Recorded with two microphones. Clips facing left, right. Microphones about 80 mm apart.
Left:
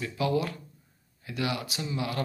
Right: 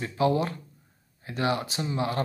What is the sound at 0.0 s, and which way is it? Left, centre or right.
Speech, right.